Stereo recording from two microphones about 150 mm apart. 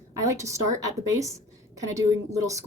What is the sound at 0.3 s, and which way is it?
A woman's voice, 20° right (ahead or behind).